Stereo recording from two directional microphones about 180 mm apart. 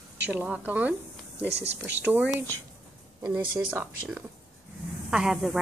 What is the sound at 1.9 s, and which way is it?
Speech, 10° right (ahead or behind).